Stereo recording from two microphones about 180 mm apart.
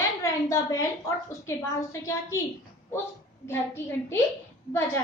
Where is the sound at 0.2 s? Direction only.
15° left (ahead or behind).